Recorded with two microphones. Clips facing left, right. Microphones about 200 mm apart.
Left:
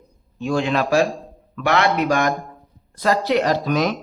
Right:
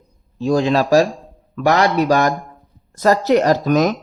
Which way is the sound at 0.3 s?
35° right (ahead or behind).